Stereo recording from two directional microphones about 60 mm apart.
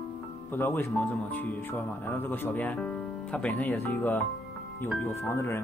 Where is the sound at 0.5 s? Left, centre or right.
Left.